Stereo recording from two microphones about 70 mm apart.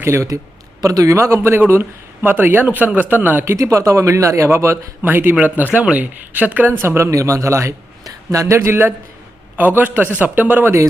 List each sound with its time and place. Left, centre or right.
0.0 s speech: right
0.8 s a man's voice: right
3.4 s speech: right
9.6 s a man's voice: right